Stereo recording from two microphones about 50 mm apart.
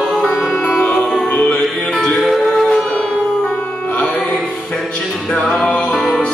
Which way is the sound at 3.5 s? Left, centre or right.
Left.